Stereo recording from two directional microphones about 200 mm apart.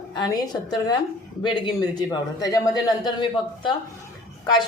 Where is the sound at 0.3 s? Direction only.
20° left (ahead or behind).